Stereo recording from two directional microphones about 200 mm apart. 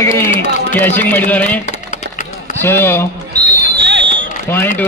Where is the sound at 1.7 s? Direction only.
35° left (ahead or behind).